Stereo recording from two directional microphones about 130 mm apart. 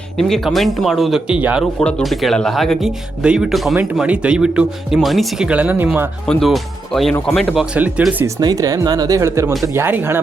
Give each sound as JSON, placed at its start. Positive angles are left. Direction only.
{"t": 0.2, "sound": "speech", "side_deg": 0}
{"t": 1.8, "sound": "speech", "side_deg": 5}
{"t": 6.2, "sound": "speech", "side_deg": 0}
{"t": 8.4, "sound": "speech", "side_deg": -30}